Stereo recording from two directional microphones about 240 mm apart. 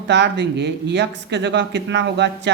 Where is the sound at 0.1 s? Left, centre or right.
Right.